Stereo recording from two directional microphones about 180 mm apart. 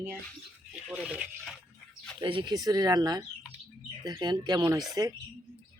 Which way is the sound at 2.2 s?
25° right (ahead or behind).